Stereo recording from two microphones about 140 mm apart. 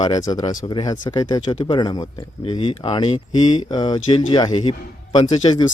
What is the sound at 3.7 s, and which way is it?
Speech, 30° left (ahead or behind).